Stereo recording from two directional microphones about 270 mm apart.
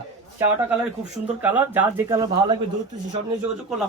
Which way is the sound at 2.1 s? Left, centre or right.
Centre.